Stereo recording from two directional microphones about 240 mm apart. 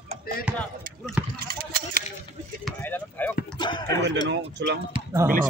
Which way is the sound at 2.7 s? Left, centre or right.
Centre.